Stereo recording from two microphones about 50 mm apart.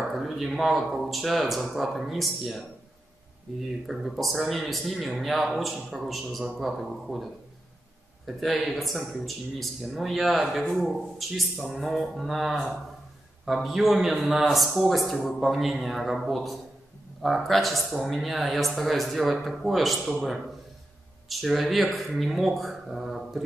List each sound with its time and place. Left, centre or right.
0.1 s a man's voice: centre
3.8 s a man's voice: centre
8.3 s a man's voice: centre